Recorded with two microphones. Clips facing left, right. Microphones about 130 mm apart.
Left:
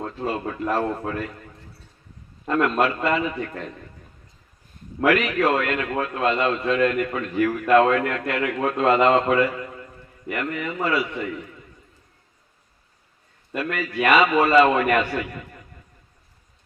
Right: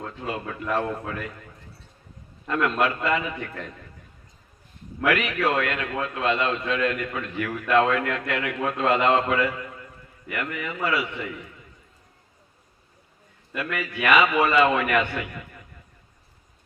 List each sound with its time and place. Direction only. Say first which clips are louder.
0.0 s a man's voice: left 5 dB; 35° left (ahead or behind)
2.5 s a man's voice: left 3 dB; 35° left (ahead or behind)
4.9 s a man's voice: left 4 dB; 30° left (ahead or behind)
13.5 s a man's voice: left 3 dB; 35° left (ahead or behind)